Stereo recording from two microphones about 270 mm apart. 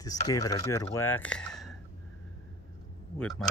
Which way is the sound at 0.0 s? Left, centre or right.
Centre.